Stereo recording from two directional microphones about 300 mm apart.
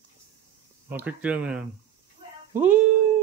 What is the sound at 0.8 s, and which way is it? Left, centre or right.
Speech, centre.